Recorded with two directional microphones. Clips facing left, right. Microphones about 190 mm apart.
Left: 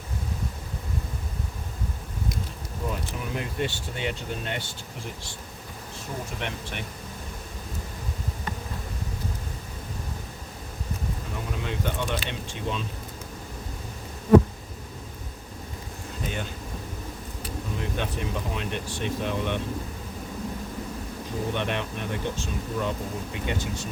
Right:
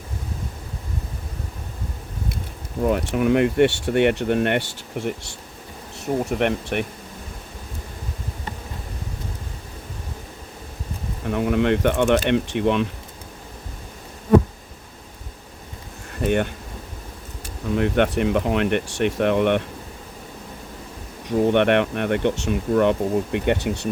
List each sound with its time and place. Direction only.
2.8 s speech: 70° right (ahead or behind)
6.3 s speech: 60° right (ahead or behind)
11.3 s speech: 65° right (ahead or behind)
16.2 s speech: 65° right (ahead or behind)
17.7 s speech: 65° right (ahead or behind)
21.2 s speech: 65° right (ahead or behind)